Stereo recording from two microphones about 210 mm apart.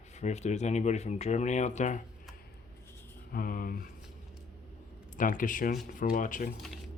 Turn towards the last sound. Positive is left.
turn(degrees=40)  # may be behind; listen again after turning